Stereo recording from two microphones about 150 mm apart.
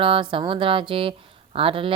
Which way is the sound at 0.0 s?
35° right (ahead or behind).